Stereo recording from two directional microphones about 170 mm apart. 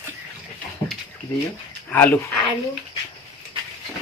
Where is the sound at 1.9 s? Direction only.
10° left (ahead or behind).